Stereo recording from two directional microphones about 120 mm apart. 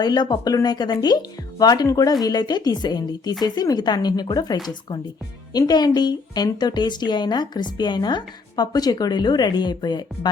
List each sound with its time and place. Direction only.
0.0 s a woman's voice: 35° left (ahead or behind)